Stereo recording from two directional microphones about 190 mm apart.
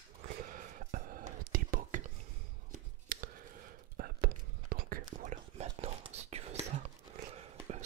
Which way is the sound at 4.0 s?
50° right (ahead or behind).